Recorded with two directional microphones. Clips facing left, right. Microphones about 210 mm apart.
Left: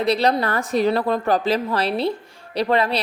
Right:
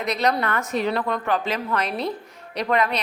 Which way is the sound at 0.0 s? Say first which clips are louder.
Left 4 dB; 30° left (ahead or behind).